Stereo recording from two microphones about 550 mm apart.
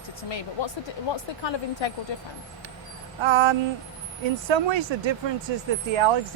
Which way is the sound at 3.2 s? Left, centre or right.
Right.